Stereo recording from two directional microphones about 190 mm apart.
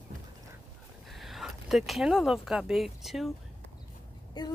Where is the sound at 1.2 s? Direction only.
Centre (ahead or behind).